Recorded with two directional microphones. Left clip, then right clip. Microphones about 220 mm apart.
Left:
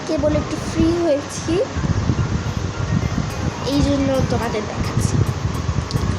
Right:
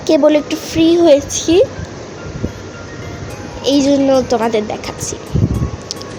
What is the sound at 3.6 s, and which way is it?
Speech, 35° right (ahead or behind).